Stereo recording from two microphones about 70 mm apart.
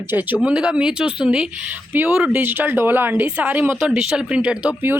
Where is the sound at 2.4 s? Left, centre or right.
Right.